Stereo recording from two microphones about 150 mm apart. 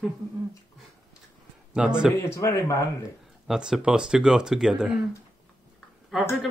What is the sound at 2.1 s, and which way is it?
Speech, 15° left (ahead or behind).